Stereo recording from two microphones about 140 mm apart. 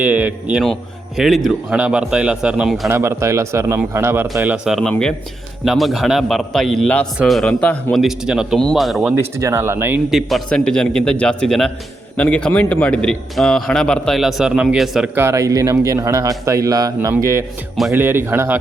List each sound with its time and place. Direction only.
0.0 s a man's voice: 10° right (ahead or behind)
0.6 s a man's voice: centre (ahead or behind)
2.9 s a man's voice: 20° right (ahead or behind); by 9.1 s centre (ahead or behind)
9.1 s a man's voice: 20° right (ahead or behind)
10.1 s a man's voice: centre (ahead or behind)
15.1 s a man's voice: 20° right (ahead or behind)